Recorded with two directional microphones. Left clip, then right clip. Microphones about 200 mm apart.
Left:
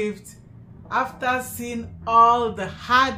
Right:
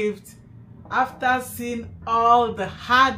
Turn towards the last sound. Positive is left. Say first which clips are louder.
# right 1 dB
turn(degrees=5)  # may be behind; listen again after turning